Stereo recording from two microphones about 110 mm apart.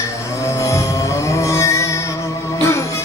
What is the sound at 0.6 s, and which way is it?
Vehicle, 30° left (ahead or behind).